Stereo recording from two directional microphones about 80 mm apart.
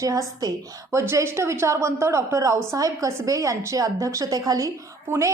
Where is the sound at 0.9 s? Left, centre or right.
Right.